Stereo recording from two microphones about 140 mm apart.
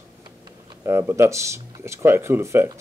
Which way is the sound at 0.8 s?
20° right (ahead or behind).